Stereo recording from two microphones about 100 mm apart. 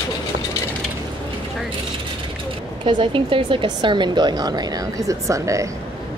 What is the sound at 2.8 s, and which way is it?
Speech, 55° right (ahead or behind).